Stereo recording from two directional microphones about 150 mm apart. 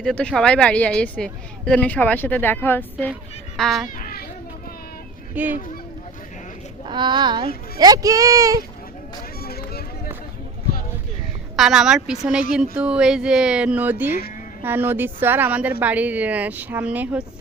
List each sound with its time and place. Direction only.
0.0 s a woman's voice: 5° left (ahead or behind)
3.6 s speech: centre (ahead or behind)
3.8 s children playing: 65° left (ahead or behind)
5.3 s speech: 10° right (ahead or behind)
6.8 s speech: 30° right (ahead or behind)
9.4 s run: 90° left
11.5 s a woman's voice: centre (ahead or behind)